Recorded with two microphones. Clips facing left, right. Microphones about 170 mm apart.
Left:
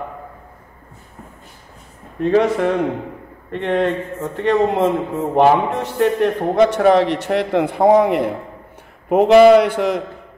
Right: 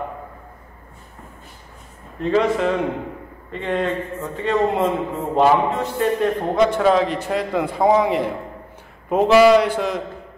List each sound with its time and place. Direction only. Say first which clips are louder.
2.3 s a man's voice: left 2 dB; 55° left (ahead or behind)
3.5 s a man's voice: left 4 dB; 65° left (ahead or behind)